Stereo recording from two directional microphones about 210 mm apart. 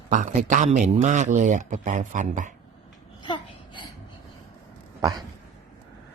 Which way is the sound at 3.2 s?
25° left (ahead or behind).